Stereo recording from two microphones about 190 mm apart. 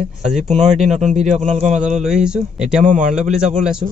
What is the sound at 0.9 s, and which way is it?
Speech, 40° right (ahead or behind).